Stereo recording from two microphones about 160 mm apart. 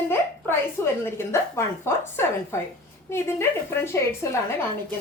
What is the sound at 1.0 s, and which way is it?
A woman's voice, 15° left (ahead or behind).